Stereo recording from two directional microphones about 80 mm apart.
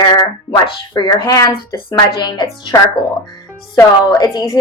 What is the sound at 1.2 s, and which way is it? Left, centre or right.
Speech, left.